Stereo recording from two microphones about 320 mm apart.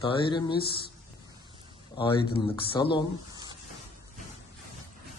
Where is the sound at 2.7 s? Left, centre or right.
Centre.